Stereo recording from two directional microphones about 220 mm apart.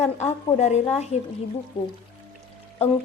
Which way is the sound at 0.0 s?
30° left (ahead or behind).